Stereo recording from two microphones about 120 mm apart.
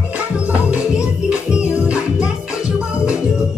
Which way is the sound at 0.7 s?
10° right (ahead or behind).